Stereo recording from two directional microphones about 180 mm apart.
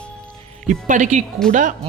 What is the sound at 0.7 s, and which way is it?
Speech, 45° right (ahead or behind).